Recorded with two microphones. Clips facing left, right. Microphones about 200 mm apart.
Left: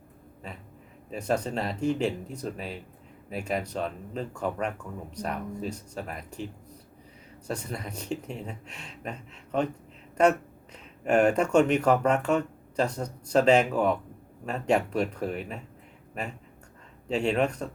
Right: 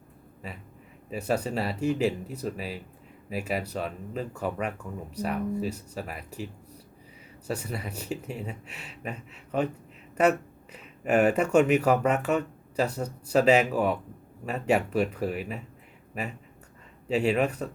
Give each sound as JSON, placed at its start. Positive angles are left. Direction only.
{"t": 1.1, "sound": "speech", "side_deg": -5}
{"t": 17.1, "sound": "speech", "side_deg": -5}